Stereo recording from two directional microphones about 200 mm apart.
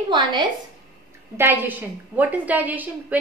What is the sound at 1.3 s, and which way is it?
A woman's voice, 10° right (ahead or behind).